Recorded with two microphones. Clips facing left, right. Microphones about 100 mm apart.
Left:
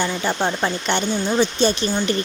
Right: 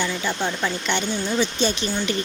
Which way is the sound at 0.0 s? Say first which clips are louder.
Left 3 dB; 40° left (ahead or behind).